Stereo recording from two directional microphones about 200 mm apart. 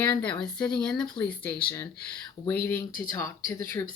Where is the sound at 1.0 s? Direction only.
25° left (ahead or behind).